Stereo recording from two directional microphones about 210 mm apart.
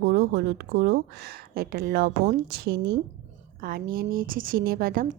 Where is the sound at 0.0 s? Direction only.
50° right (ahead or behind).